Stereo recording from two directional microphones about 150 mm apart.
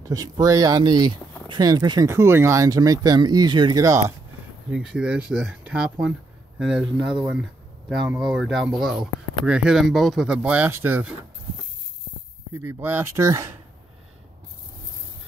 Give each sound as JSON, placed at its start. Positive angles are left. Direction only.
{"t": 0.0, "sound": "speech", "side_deg": -25}
{"t": 4.6, "sound": "speech", "side_deg": -5}
{"t": 12.5, "sound": "speech", "side_deg": -15}